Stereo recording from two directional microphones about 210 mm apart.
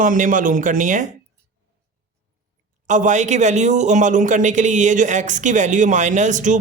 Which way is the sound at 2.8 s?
35° right (ahead or behind).